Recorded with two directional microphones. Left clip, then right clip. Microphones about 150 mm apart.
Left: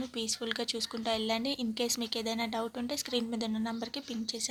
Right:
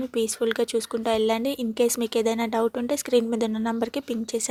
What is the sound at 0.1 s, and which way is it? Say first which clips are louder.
A woman's voice: right 13 dB; 40° right (ahead or behind).